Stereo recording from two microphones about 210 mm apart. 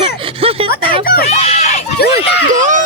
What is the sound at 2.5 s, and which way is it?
Speech, 35° right (ahead or behind).